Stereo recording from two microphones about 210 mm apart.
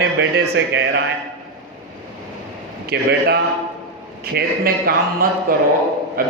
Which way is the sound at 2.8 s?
50° right (ahead or behind).